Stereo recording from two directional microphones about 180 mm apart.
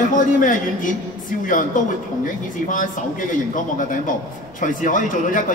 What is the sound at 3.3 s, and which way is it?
Speech, 45° left (ahead or behind).